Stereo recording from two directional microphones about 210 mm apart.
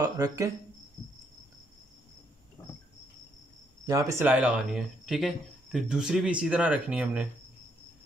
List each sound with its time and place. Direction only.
0.0 s speech: 15° right (ahead or behind)
3.8 s speech: 15° right (ahead or behind)